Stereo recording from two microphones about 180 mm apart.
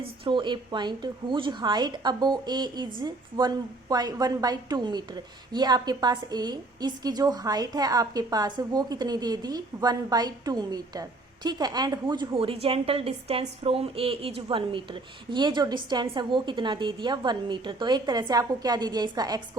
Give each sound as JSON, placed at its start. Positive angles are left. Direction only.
{"t": 0.0, "sound": "a woman's voice", "side_deg": -25}